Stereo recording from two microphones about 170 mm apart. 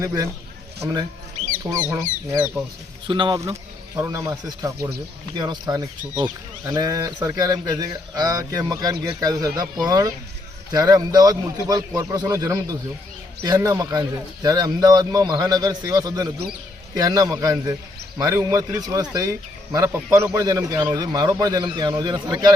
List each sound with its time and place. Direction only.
0.0 s speech: 15° right (ahead or behind)
1.6 s speech: 15° right (ahead or behind)
3.1 s speech: 30° right (ahead or behind)